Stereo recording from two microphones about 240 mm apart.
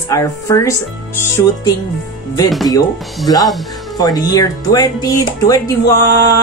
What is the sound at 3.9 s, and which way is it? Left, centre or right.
Speech, centre.